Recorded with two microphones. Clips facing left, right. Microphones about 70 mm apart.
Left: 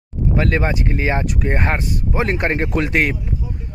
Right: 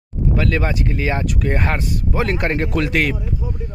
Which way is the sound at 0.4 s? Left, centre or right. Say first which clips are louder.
Left 2 dB; left.